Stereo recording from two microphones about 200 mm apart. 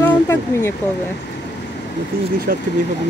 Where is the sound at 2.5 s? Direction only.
40° right (ahead or behind).